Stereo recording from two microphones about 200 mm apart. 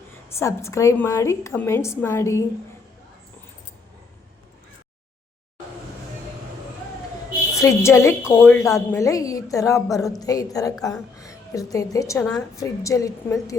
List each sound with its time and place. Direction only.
0.1 s a woman's voice: 15° left (ahead or behind)
7.5 s a woman's voice: 15° left (ahead or behind)